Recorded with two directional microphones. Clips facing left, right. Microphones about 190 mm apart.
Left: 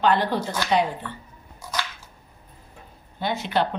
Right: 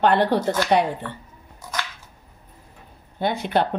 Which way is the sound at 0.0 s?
60° right (ahead or behind).